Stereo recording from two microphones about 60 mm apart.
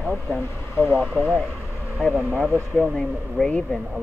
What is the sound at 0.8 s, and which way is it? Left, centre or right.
Speech, left.